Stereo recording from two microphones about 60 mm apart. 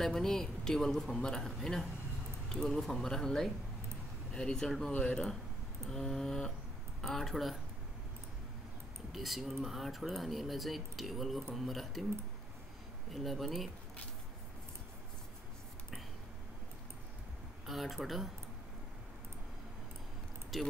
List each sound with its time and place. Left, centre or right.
0.0 s a man's voice: centre
9.1 s speech: centre
13.1 s speech: centre
17.6 s speech: centre
20.5 s speech: centre